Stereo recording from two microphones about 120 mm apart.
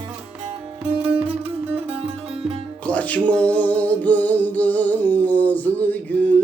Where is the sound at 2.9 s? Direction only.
10° left (ahead or behind).